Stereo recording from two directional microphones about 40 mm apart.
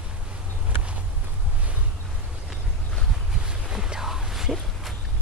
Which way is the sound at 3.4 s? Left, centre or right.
Right.